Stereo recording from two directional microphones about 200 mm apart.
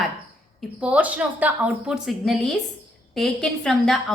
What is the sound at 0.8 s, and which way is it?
A woman's voice, 5° right (ahead or behind).